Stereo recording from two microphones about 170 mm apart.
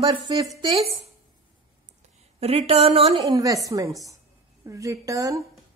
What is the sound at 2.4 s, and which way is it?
Speech, 35° right (ahead or behind).